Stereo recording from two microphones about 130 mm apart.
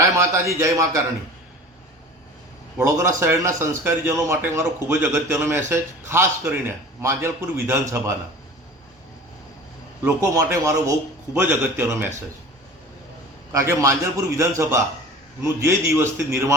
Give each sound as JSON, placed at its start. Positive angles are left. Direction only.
{"t": 0.0, "sound": "a man's voice", "side_deg": -20}
{"t": 2.7, "sound": "a man's voice", "side_deg": -25}
{"t": 10.2, "sound": "a man's voice", "side_deg": -25}
{"t": 13.5, "sound": "a man's voice", "side_deg": -25}